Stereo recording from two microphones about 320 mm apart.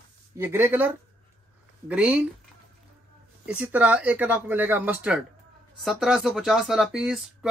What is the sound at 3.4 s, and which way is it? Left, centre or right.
Speech, centre.